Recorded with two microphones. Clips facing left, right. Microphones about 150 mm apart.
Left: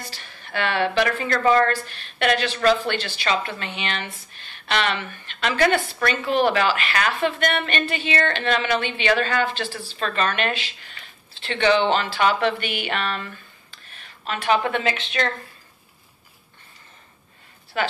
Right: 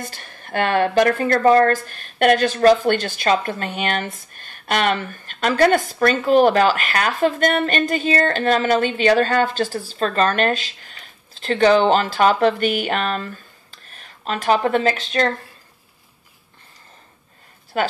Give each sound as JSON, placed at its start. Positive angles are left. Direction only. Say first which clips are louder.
{"t": 0.0, "sound": "a woman's voice", "louder": "right 5 dB", "side_deg": -50}
{"t": 17.7, "sound": "a woman's voice", "louder": "right 4 dB", "side_deg": -40}